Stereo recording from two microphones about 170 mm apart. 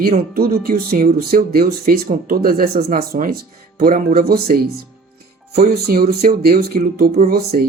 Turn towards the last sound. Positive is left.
turn(degrees=-65)  # may be behind; listen again after turning